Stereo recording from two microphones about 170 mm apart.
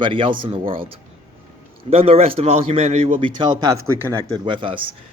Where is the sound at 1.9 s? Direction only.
35° right (ahead or behind).